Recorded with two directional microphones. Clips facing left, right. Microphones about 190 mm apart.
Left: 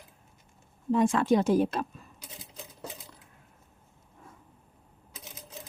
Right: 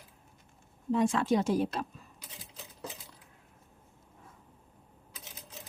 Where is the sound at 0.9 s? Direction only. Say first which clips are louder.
Left 3 dB; 50° left (ahead or behind).